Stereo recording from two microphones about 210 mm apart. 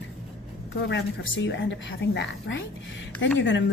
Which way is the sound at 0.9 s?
60° left (ahead or behind).